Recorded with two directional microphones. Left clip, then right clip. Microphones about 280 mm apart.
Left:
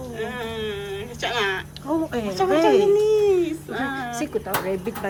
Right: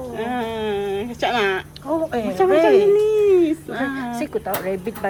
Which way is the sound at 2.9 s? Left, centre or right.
Right.